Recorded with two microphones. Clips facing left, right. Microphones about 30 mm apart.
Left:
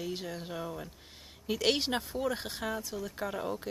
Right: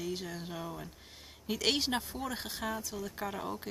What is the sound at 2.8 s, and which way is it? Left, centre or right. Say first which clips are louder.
Speech: left 2 dB; centre.